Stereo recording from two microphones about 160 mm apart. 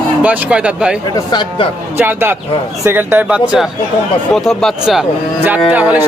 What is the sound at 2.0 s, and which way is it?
Speech, 15° right (ahead or behind).